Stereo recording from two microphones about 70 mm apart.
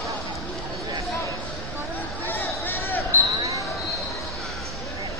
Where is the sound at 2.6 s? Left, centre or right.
Left.